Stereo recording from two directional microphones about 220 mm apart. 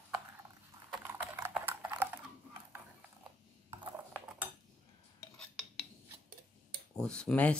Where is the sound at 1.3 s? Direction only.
10° right (ahead or behind).